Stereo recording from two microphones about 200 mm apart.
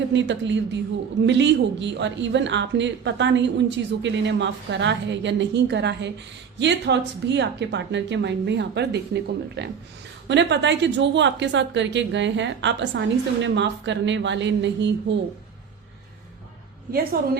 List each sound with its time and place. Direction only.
0.1 s a woman's voice: 65° right (ahead or behind)
16.9 s a woman's voice: 50° right (ahead or behind)